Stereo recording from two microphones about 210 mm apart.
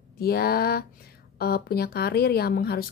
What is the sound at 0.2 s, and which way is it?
Speech, 45° left (ahead or behind).